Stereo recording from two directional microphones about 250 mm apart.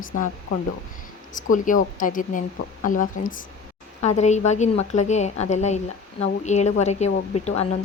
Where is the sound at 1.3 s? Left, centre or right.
Left.